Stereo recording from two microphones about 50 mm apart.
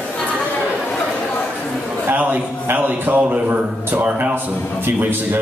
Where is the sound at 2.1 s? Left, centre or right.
Right.